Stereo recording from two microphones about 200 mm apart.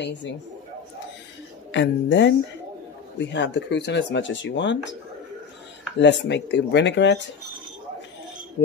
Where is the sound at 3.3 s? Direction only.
60° left (ahead or behind).